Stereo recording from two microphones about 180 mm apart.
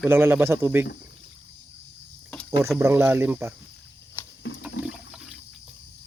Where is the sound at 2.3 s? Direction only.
5° left (ahead or behind).